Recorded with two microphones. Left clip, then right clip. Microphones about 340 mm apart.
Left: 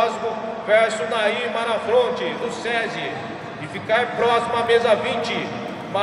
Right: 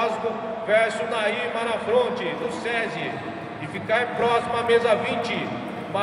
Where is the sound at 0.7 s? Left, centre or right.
Left.